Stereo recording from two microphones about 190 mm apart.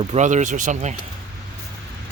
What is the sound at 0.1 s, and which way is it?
Speech, 40° right (ahead or behind).